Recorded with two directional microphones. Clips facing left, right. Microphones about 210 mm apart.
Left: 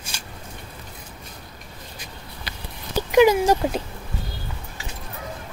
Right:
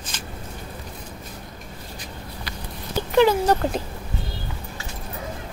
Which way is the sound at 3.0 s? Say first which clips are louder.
Left 2 dB; 10° left (ahead or behind).